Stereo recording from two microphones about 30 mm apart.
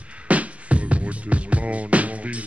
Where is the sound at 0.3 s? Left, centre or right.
Right.